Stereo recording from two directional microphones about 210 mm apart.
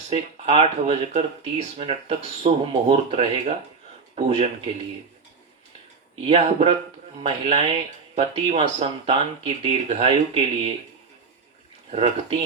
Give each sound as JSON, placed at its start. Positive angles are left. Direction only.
{"t": 0.1, "sound": "speech", "side_deg": -25}
{"t": 6.2, "sound": "speech", "side_deg": -30}
{"t": 11.9, "sound": "speech", "side_deg": -30}